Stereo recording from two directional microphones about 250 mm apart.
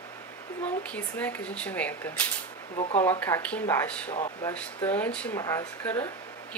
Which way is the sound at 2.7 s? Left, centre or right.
Left.